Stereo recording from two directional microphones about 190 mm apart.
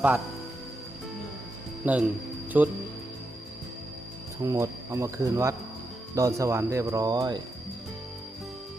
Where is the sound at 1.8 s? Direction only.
10° right (ahead or behind).